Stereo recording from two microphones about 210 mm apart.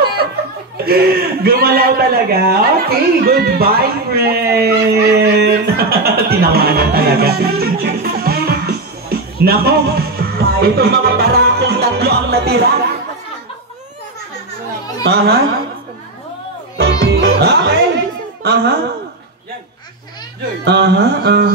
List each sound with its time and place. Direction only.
0.2 s laughter: 45° right (ahead or behind)
0.8 s a man's voice: 45° right (ahead or behind)
15.0 s a sound: 50° right (ahead or behind)
16.7 s music: 50° right (ahead or behind)
17.4 s speech: 50° right (ahead or behind)
20.6 s a sound: 55° right (ahead or behind)